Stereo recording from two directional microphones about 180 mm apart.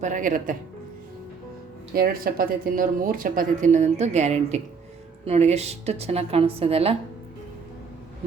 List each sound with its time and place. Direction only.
0.0 s speech: 45° right (ahead or behind)
2.0 s a woman's voice: 55° right (ahead or behind); by 6.9 s 35° right (ahead or behind)